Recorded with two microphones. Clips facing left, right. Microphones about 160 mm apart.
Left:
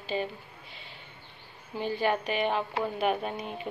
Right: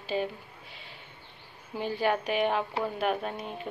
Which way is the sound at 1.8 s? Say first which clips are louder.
Even; 5° right (ahead or behind).